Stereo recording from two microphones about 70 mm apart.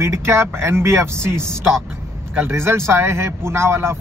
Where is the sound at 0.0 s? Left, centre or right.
Right.